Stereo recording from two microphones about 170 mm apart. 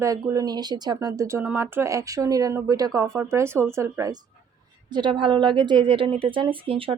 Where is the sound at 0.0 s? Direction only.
20° right (ahead or behind).